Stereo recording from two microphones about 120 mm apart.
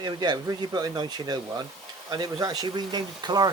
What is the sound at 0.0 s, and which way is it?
Speech, 35° right (ahead or behind).